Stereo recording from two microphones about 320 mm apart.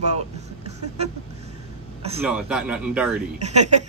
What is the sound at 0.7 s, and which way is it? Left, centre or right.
Vehicle, centre.